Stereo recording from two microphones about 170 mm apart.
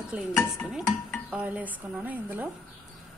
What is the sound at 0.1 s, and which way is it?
Speech, 10° right (ahead or behind).